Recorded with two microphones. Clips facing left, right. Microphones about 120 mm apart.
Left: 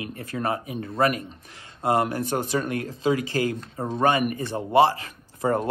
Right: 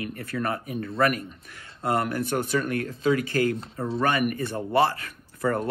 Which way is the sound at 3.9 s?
20° left (ahead or behind).